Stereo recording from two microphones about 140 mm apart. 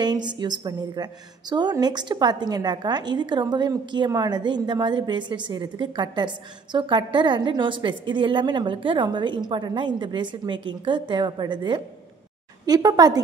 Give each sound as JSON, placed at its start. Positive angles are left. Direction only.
{"t": 0.0, "sound": "a woman's voice", "side_deg": -30}